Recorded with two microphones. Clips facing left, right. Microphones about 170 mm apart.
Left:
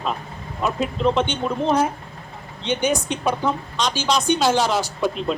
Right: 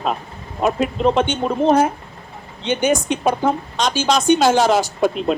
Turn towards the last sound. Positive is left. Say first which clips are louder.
# right 4 dB
turn(degrees=-50)  # may be behind; listen again after turning